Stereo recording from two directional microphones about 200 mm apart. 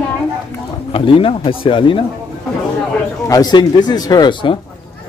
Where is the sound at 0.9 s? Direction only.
25° left (ahead or behind).